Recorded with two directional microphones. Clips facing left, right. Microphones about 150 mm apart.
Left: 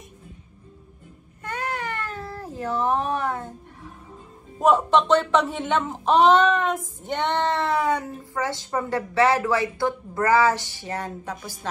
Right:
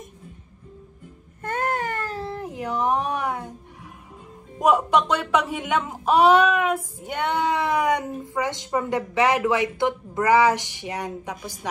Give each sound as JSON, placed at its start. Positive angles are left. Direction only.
{"t": 1.4, "sound": "baby cry", "side_deg": -50}
{"t": 4.6, "sound": "speech", "side_deg": -10}